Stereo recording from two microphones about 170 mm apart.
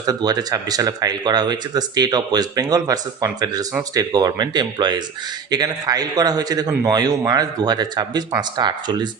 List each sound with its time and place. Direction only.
0.0 s speech: 20° right (ahead or behind)